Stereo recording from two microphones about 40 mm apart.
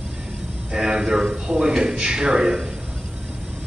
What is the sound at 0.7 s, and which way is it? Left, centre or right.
A man's voice, centre.